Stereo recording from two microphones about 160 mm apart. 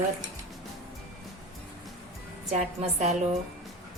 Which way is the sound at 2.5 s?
45° right (ahead or behind).